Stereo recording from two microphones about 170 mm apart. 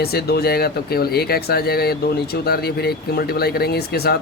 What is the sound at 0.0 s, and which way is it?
Speech, 65° left (ahead or behind).